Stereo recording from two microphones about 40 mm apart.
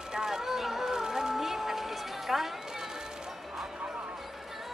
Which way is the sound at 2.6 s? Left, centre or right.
Centre.